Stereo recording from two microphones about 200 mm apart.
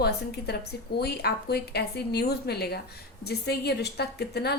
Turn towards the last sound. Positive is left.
turn(degrees=55)  # may be behind; listen again after turning